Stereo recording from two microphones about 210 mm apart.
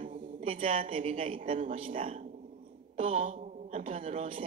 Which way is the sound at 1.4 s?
40° right (ahead or behind).